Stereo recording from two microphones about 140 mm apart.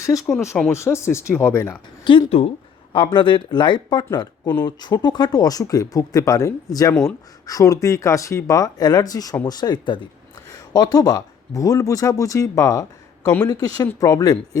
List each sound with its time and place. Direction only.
0.3 s speech: 15° left (ahead or behind)
2.0 s speech: 35° left (ahead or behind)
6.9 s speech: 10° left (ahead or behind)
7.4 s speech: 25° left (ahead or behind)